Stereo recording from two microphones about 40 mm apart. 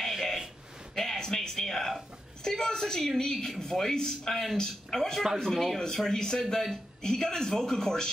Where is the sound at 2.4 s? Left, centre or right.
Centre.